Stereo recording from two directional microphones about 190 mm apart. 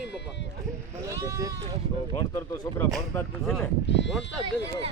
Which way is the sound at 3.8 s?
70° left (ahead or behind).